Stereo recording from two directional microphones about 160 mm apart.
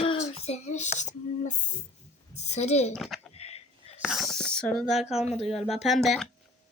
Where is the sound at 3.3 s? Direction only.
40° left (ahead or behind).